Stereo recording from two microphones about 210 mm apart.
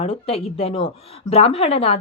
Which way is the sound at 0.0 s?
30° left (ahead or behind).